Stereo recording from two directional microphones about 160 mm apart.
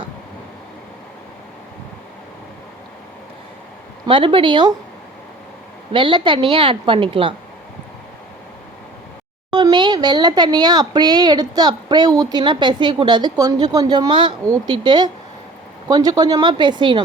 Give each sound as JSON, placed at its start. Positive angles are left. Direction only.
{"t": 4.0, "sound": "a woman's voice", "side_deg": -35}
{"t": 5.9, "sound": "a woman's voice", "side_deg": -30}
{"t": 9.5, "sound": "speech", "side_deg": -25}